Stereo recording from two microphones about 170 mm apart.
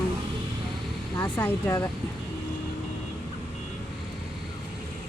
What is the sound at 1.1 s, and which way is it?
Speech, 15° left (ahead or behind).